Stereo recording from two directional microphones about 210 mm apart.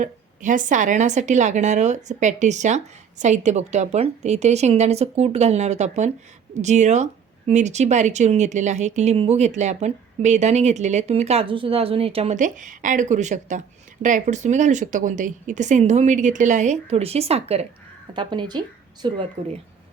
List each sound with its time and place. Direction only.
0.0 s speech: 35° right (ahead or behind); by 19.2 s 20° right (ahead or behind)